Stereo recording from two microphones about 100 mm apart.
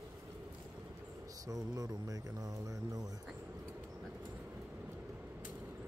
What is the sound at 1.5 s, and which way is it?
Speech, 40° right (ahead or behind).